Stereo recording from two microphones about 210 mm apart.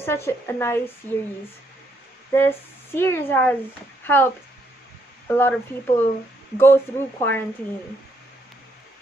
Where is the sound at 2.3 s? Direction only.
10° left (ahead or behind).